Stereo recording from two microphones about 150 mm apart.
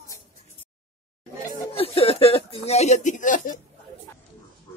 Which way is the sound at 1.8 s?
40° left (ahead or behind).